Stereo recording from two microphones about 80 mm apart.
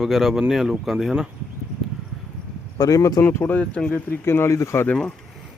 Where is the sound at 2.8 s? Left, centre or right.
Left.